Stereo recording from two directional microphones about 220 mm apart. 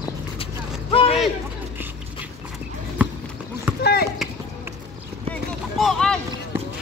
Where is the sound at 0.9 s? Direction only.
25° left (ahead or behind).